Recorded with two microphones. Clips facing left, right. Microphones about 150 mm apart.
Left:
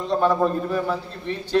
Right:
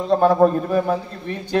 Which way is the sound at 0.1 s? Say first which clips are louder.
Right 5 dB; 45° right (ahead or behind).